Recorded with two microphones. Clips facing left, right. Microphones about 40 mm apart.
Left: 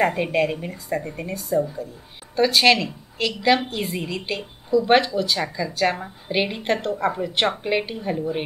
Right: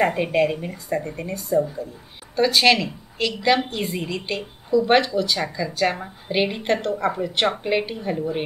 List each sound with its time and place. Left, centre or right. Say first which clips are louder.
0.0 s a woman's voice: right 1 dB; centre